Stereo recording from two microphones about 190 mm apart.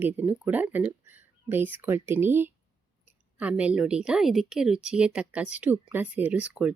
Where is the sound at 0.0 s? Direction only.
10° right (ahead or behind).